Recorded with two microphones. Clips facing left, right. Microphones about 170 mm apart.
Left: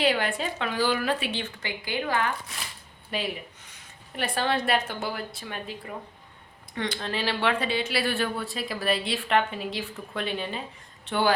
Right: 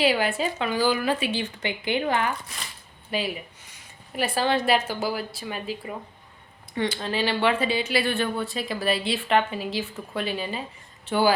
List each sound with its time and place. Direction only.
0.0 s speech: 5° right (ahead or behind)
1.6 s speech: 20° right (ahead or behind)
3.1 s speech: centre (ahead or behind)